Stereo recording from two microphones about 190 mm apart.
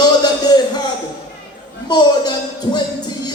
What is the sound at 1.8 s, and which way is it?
Speech, 20° left (ahead or behind).